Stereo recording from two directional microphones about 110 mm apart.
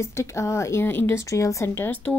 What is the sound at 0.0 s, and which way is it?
A woman's voice, 25° left (ahead or behind).